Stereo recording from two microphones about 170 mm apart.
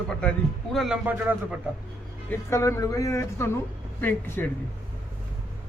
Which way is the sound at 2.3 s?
15° left (ahead or behind).